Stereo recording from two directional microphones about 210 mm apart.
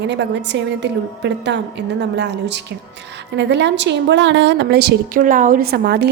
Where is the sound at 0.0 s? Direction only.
55° right (ahead or behind).